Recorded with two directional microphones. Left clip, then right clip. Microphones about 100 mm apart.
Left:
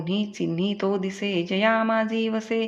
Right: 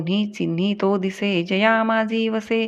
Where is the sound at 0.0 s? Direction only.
40° right (ahead or behind).